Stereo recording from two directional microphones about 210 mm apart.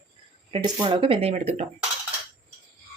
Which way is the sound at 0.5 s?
25° right (ahead or behind).